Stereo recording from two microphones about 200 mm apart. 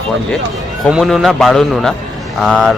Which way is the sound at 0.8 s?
Centre (ahead or behind).